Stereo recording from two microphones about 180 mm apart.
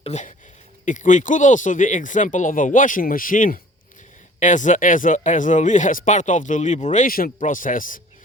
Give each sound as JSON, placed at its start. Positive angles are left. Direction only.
{"t": 0.0, "sound": "speech", "side_deg": 40}